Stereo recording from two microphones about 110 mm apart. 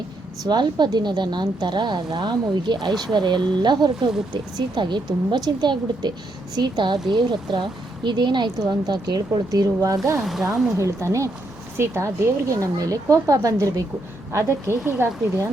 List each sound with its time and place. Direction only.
0.4 s a woman's voice: 40° right (ahead or behind)
10.2 s speech: 5° right (ahead or behind)
10.8 s speech: 25° right (ahead or behind)
14.3 s speech: 20° right (ahead or behind)